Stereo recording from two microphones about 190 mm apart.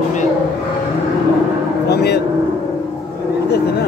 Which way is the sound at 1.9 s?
60° left (ahead or behind).